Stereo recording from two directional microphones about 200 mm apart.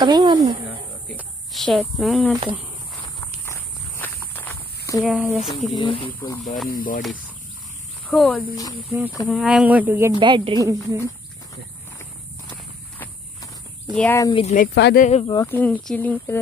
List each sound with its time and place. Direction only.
0.0 s speech: 20° right (ahead or behind)
1.1 s speech: centre (ahead or behind)
4.0 s walk: 10° left (ahead or behind)
5.0 s speech: 5° right (ahead or behind)
5.8 s speech: 25° left (ahead or behind)
6.7 s speech: 45° left (ahead or behind)
8.1 s speech: centre (ahead or behind)
10.2 s speech: 25° right (ahead or behind)
13.9 s speech: 10° left (ahead or behind)
14.3 s speech: 35° left (ahead or behind)
14.7 s speech: 60° left (ahead or behind)
15.0 s speech: 35° left (ahead or behind)
15.2 s speech: 20° left (ahead or behind)
15.5 s speech: 10° left (ahead or behind)